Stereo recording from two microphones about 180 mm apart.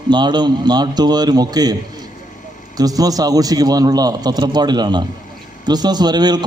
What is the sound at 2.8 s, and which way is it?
A man's voice, 20° right (ahead or behind).